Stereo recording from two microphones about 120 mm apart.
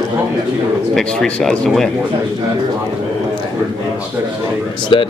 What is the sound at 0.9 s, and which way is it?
Speech, 5° left (ahead or behind).